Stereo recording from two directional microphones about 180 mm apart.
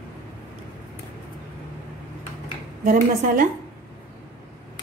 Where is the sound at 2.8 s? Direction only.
50° right (ahead or behind).